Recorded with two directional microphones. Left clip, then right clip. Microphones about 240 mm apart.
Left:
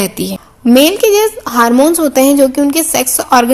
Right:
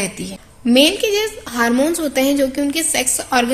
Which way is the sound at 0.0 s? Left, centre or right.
Left.